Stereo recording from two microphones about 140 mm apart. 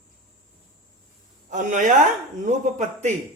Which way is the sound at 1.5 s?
60° right (ahead or behind).